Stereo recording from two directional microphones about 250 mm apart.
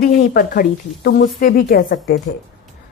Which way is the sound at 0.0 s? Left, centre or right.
Left.